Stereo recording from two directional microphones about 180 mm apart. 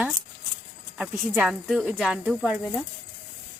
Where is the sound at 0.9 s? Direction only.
10° right (ahead or behind).